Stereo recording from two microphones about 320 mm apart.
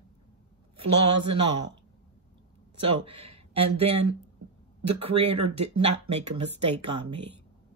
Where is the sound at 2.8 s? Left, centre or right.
Centre.